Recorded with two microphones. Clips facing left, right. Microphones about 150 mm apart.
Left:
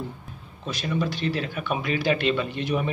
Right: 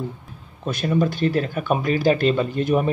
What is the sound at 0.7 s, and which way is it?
Speech, 50° right (ahead or behind).